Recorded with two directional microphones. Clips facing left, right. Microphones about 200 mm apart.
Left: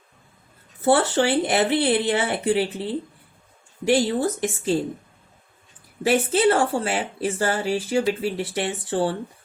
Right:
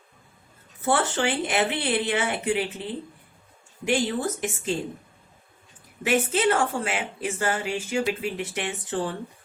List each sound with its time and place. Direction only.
0.8 s a woman's voice: 35° left (ahead or behind)
6.0 s a woman's voice: 35° left (ahead or behind)